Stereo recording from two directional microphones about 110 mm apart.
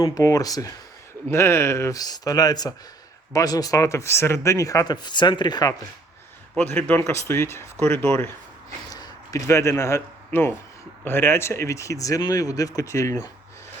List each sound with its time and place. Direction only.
0.0 s speech: 35° left (ahead or behind)
2.0 s speech: 35° left (ahead or behind)
6.6 s speech: 15° left (ahead or behind)
8.9 s a sound: 35° left (ahead or behind)
9.5 s speech: 25° left (ahead or behind)